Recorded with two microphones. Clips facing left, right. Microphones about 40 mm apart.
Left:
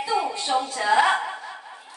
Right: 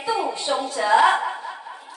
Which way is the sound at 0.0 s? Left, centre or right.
Centre.